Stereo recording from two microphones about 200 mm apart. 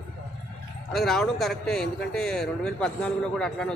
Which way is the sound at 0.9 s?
Centre (ahead or behind).